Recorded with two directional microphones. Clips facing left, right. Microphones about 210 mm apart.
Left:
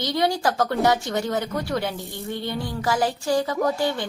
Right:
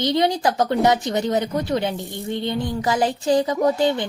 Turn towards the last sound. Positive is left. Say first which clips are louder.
# right 4 dB
turn(degrees=-20)  # may be behind; listen again after turning